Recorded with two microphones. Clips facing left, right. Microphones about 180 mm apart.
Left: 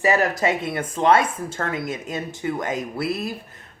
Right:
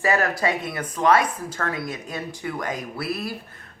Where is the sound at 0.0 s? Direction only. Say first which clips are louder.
Left 2 dB; 20° left (ahead or behind).